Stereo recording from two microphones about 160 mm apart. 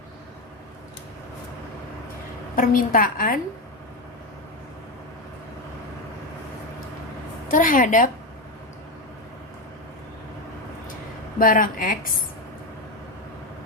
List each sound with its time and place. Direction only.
2.6 s a woman's voice: 60° left (ahead or behind)
7.4 s a woman's voice: 55° left (ahead or behind)
11.3 s a woman's voice: 60° left (ahead or behind)